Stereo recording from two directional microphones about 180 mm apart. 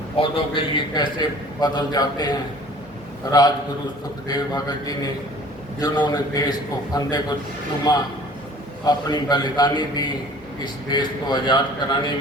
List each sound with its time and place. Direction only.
0.2 s a man's voice: 25° left (ahead or behind)
3.3 s a man's voice: 20° left (ahead or behind)